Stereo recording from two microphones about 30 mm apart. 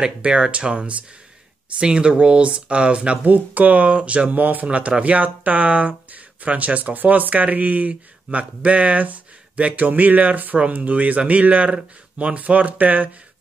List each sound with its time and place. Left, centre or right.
0.2 s speech: right
3.3 s speech: right
3.9 s speech: right
4.3 s speech: right
4.6 s speech: right
6.8 s speech: right
8.3 s speech: right
9.8 s speech: right
10.7 s speech: right
12.4 s speech: right